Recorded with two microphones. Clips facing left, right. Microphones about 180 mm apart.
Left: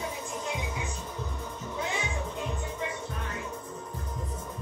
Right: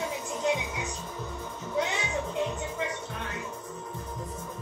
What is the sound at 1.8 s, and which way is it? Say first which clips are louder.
Music: right 6 dB; 80° right.